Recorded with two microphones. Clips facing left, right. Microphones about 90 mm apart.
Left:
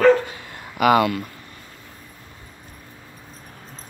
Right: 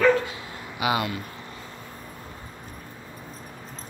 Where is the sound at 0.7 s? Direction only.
65° left (ahead or behind).